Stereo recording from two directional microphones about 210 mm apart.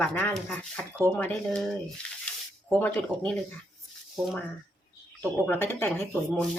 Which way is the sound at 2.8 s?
10° left (ahead or behind).